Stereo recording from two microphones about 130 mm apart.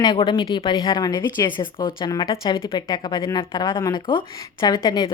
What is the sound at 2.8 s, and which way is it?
Speech, 30° left (ahead or behind).